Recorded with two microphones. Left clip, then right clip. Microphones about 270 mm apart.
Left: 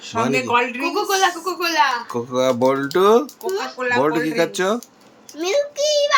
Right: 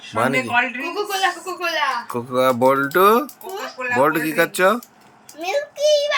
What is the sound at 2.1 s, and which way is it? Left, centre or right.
Speech, centre.